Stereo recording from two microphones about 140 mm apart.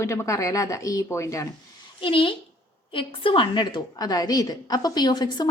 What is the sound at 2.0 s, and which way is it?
A child's voice, 40° left (ahead or behind).